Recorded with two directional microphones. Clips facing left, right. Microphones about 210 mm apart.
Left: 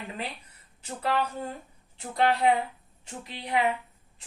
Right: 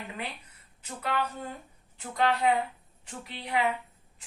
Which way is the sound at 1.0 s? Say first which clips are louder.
Left 3 dB; 30° left (ahead or behind).